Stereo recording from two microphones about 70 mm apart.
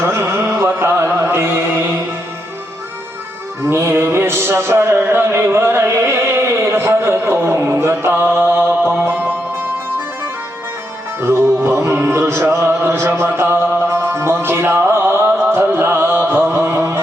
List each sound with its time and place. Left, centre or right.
0.0 s carnatic music: right
3.6 s music: right
11.2 s music: right